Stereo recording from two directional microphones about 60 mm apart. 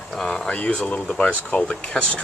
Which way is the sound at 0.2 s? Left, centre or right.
Centre.